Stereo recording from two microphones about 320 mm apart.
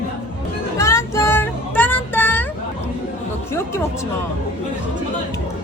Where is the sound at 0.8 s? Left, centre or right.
Centre.